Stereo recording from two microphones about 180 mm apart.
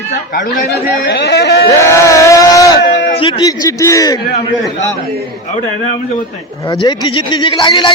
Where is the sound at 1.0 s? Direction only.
65° left (ahead or behind).